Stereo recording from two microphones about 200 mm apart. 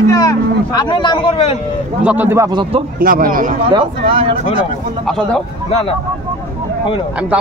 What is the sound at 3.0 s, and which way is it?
Speech, 45° right (ahead or behind).